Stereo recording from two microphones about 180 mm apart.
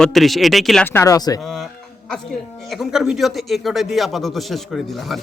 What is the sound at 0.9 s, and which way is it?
Speech, 15° left (ahead or behind).